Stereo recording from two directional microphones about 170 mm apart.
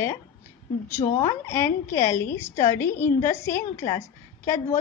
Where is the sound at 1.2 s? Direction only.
15° left (ahead or behind).